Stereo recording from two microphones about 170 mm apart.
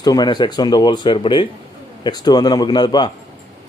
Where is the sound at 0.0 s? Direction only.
25° left (ahead or behind).